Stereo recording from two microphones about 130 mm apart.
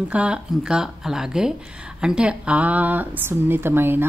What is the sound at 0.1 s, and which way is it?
Speech, 10° right (ahead or behind).